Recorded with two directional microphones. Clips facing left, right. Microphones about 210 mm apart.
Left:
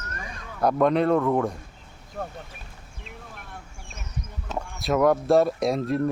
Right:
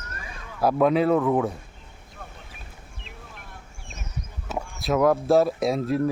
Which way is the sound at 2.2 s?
55° left (ahead or behind).